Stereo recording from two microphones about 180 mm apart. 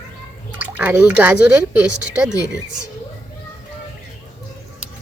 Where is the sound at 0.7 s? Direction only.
10° right (ahead or behind).